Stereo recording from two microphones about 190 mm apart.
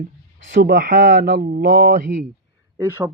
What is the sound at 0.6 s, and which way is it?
Speech, 50° right (ahead or behind).